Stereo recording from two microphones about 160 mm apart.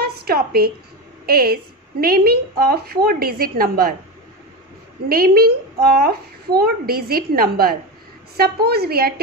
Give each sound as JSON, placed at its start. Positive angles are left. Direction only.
{"t": 0.0, "sound": "a sound", "side_deg": -75}
{"t": 1.2, "sound": "a woman's voice", "side_deg": -70}
{"t": 5.0, "sound": "a woman's voice", "side_deg": -70}